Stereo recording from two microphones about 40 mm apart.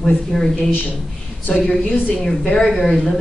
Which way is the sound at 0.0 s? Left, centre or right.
Centre.